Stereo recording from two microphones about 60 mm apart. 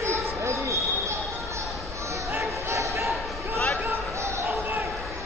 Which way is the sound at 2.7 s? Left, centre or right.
Right.